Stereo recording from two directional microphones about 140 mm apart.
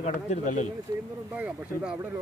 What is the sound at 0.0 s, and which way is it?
Speech, 60° left (ahead or behind).